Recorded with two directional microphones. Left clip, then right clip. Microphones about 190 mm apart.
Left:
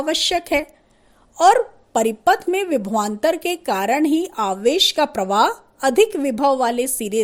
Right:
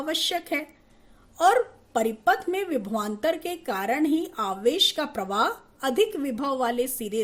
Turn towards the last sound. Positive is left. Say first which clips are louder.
# left 6 dB
turn(degrees=40)  # may be behind; listen again after turning